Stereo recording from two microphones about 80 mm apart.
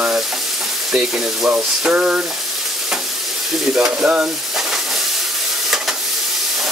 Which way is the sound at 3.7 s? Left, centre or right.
Centre.